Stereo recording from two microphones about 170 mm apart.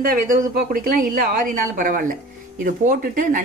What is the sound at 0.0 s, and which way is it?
A woman's voice, 55° right (ahead or behind).